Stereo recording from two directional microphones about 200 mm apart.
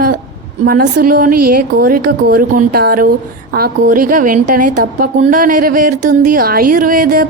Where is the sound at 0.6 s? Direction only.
50° right (ahead or behind).